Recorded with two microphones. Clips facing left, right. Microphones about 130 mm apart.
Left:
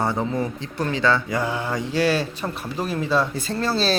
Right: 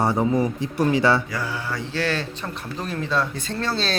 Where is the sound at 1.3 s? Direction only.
20° left (ahead or behind).